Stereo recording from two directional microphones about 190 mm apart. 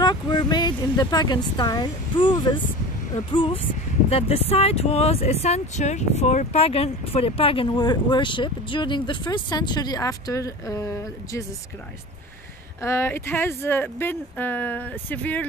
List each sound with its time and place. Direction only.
0.0 s speech: 25° left (ahead or behind)
12.8 s speech: 15° left (ahead or behind)